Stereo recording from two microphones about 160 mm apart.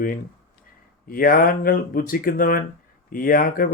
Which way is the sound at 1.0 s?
65° left (ahead or behind).